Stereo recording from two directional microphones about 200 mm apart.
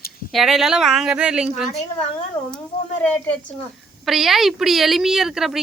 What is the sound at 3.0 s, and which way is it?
A woman's voice, 10° left (ahead or behind).